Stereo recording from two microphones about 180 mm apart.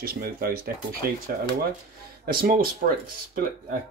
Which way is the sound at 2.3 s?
55° right (ahead or behind).